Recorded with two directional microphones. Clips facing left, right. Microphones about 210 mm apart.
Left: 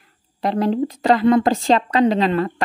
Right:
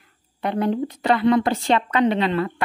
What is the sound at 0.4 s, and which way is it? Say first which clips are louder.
A woman's voice: left 3 dB; 35° left (ahead or behind).